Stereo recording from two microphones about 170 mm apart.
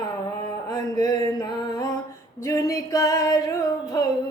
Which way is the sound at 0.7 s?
20° left (ahead or behind).